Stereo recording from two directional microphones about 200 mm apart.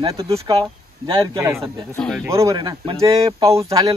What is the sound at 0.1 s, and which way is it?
Speech, 15° right (ahead or behind).